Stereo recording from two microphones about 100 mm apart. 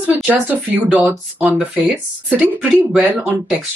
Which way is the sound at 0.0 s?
15° right (ahead or behind).